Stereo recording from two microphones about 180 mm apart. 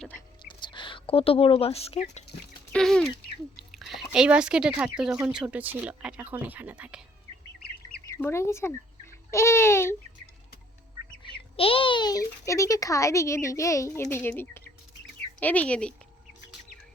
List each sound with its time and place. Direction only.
0.4 s speech: 25° left (ahead or behind)
2.7 s speech: 5° left (ahead or behind)
8.0 s a woman's voice: 15° left (ahead or behind)
11.2 s a child's voice: 30° left (ahead or behind); by 16.0 s 5° left (ahead or behind)